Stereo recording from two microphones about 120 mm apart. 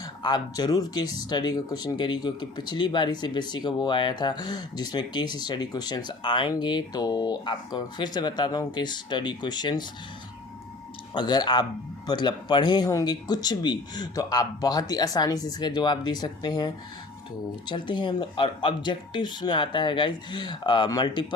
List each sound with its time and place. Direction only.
0.0 s speech: 35° left (ahead or behind)
11.1 s speech: 35° left (ahead or behind)